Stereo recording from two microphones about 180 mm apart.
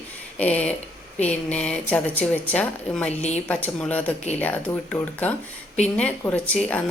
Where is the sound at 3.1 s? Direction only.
40° left (ahead or behind).